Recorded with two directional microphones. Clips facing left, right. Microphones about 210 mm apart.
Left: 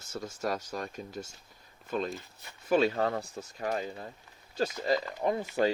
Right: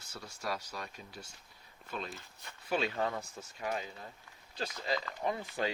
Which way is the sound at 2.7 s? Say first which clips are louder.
Left 7 dB; 45° left (ahead or behind).